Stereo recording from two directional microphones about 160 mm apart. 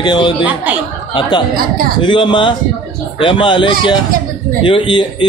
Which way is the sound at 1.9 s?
30° left (ahead or behind).